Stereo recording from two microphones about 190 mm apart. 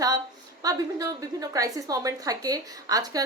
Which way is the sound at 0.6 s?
20° right (ahead or behind).